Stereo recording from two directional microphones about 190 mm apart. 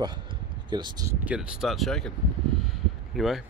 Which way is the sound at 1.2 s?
5° right (ahead or behind).